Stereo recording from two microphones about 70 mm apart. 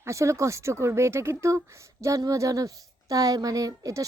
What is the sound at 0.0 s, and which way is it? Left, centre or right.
Speech, right.